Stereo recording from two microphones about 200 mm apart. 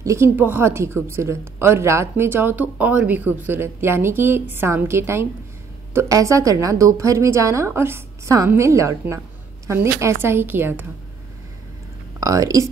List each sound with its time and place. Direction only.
0.0 s a woman's voice: 15° right (ahead or behind)
12.2 s speech: 15° right (ahead or behind)